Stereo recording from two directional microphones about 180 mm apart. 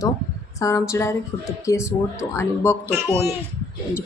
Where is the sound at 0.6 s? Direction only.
15° left (ahead or behind).